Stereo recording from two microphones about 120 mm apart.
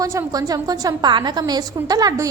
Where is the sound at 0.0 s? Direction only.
25° right (ahead or behind).